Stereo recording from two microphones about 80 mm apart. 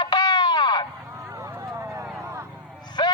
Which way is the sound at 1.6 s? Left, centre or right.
Right.